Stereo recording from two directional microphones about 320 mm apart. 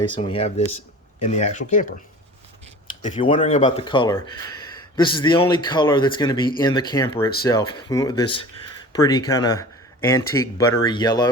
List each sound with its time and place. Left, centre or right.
0.2 s speech: centre
3.0 s speech: centre